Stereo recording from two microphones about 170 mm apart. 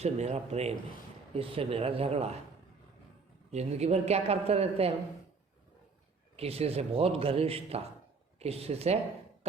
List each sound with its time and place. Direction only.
0.0 s a man's voice: 40° right (ahead or behind)
3.5 s a man's voice: 40° right (ahead or behind)
6.3 s a man's voice: 35° right (ahead or behind)